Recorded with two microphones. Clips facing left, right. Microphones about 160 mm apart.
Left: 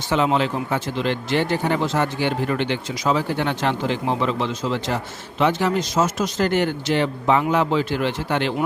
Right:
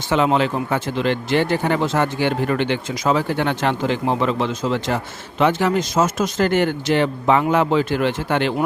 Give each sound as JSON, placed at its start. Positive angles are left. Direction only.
{"t": 0.1, "sound": "speech", "side_deg": -60}